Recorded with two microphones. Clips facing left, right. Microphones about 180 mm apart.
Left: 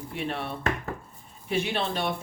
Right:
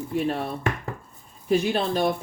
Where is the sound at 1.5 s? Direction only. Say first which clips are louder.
Right 6 dB; 40° right (ahead or behind).